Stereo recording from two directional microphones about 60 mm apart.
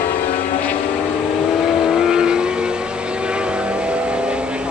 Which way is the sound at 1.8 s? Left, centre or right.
Centre.